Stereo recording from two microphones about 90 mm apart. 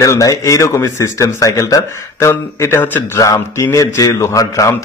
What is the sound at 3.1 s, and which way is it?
Speech, 35° left (ahead or behind).